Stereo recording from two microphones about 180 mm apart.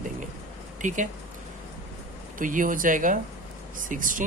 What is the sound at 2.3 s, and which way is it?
Speech, 50° right (ahead or behind).